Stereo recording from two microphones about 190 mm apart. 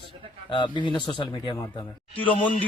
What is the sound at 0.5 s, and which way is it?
Speech, 25° left (ahead or behind).